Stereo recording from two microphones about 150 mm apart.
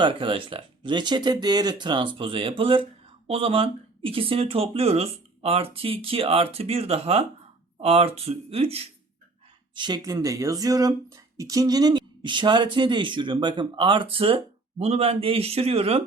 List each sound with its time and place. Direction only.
0.0 s speech: 35° right (ahead or behind)
9.7 s speech: 30° right (ahead or behind)